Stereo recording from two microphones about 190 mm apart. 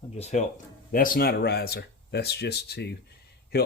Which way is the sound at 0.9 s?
50° left (ahead or behind).